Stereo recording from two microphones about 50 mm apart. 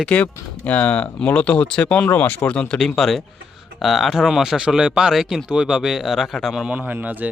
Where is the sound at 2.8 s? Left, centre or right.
Centre.